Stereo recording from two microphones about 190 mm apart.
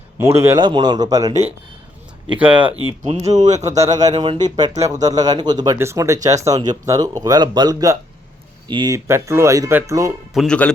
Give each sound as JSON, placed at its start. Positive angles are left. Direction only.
{"t": 0.2, "sound": "speech", "side_deg": -15}
{"t": 3.2, "sound": "speech", "side_deg": -35}
{"t": 3.7, "sound": "speech", "side_deg": -20}
{"t": 10.3, "sound": "speech", "side_deg": 5}